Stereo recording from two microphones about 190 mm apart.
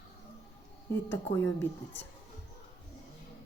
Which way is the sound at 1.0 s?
10° left (ahead or behind).